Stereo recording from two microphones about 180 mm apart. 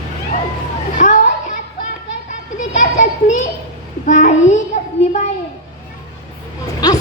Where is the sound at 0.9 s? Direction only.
45° left (ahead or behind).